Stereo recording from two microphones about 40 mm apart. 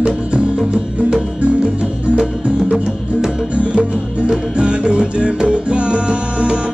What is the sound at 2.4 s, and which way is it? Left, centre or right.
Music, right.